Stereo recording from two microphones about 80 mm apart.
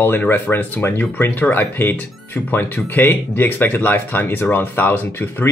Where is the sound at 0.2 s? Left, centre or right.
Left.